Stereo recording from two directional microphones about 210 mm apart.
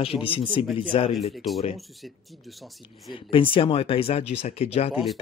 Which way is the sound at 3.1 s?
25° left (ahead or behind).